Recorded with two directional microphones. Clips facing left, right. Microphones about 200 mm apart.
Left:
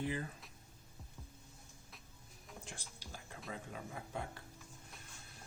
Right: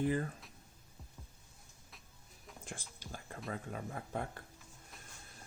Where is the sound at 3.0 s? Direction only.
50° right (ahead or behind).